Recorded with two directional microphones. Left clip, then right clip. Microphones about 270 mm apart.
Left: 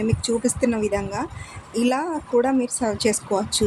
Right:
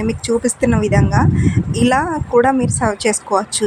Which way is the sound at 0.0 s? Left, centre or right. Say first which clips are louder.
Right 5 dB; centre.